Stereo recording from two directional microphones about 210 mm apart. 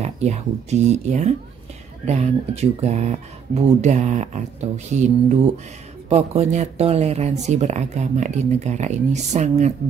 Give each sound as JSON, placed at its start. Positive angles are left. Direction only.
{"t": 0.0, "sound": "speech", "side_deg": -30}